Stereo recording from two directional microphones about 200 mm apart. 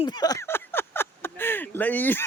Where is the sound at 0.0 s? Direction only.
20° left (ahead or behind).